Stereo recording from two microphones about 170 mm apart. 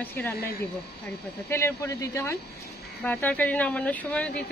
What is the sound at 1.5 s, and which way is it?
Speech, 15° left (ahead or behind).